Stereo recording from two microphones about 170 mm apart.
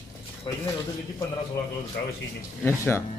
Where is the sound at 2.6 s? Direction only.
15° left (ahead or behind).